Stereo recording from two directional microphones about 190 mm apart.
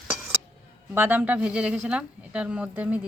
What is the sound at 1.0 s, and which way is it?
Speech, 10° right (ahead or behind).